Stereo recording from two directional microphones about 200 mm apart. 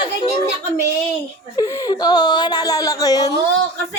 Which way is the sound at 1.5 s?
20° left (ahead or behind).